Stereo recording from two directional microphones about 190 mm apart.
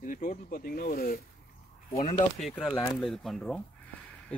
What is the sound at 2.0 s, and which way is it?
Speech, 30° left (ahead or behind).